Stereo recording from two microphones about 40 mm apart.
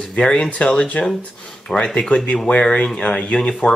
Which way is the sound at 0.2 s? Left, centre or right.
Centre.